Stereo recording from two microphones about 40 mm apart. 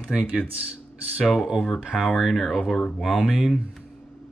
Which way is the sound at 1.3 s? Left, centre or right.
Centre.